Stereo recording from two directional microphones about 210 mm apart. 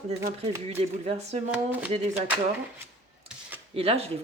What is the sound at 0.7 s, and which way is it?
Speech, 30° right (ahead or behind).